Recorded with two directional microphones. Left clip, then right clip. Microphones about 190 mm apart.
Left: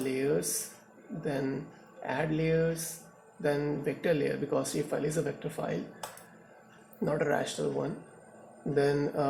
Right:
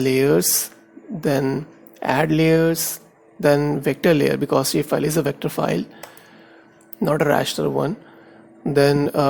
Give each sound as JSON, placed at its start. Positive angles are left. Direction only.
{"t": 0.0, "sound": "speech", "side_deg": -50}
{"t": 8.7, "sound": "speech", "side_deg": -40}